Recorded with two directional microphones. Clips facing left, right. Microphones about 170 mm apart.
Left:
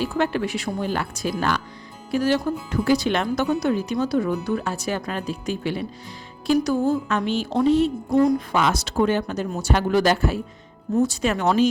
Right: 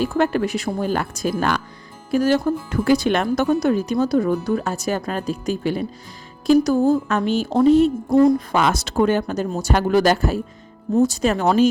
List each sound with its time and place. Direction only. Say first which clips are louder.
0.0 s speech: right 4 dB; 45° right (ahead or behind)